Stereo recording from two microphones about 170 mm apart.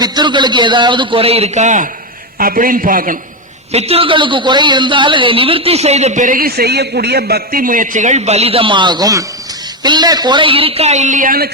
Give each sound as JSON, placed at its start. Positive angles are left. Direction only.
{"t": 0.0, "sound": "a man's voice", "side_deg": -25}
{"t": 2.4, "sound": "a man's voice", "side_deg": -55}
{"t": 3.7, "sound": "a man's voice", "side_deg": -35}